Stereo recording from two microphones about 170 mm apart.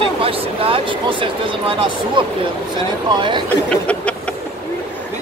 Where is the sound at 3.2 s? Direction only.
30° right (ahead or behind).